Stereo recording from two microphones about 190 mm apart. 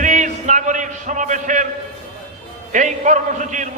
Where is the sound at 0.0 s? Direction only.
40° right (ahead or behind).